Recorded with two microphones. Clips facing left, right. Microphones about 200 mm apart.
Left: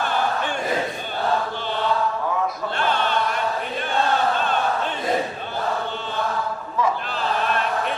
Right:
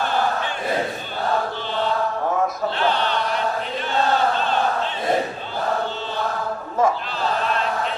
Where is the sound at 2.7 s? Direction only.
50° left (ahead or behind).